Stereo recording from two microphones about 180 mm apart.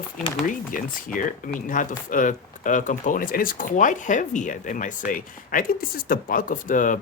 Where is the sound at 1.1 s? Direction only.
45° left (ahead or behind).